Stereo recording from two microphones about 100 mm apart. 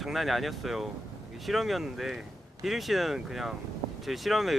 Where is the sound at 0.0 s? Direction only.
Centre (ahead or behind).